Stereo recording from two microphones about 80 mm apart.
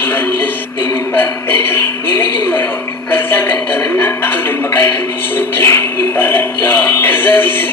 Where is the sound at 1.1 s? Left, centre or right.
Left.